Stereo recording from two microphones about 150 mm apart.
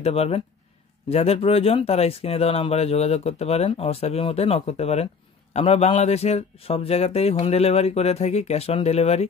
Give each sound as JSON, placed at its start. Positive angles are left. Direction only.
{"t": 0.0, "sound": "speech", "side_deg": 45}